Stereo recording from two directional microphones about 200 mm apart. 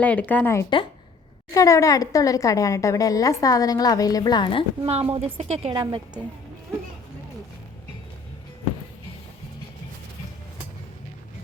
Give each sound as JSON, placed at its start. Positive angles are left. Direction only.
{"t": 0.0, "sound": "a woman's voice", "side_deg": 10}
{"t": 4.8, "sound": "a woman's voice", "side_deg": -30}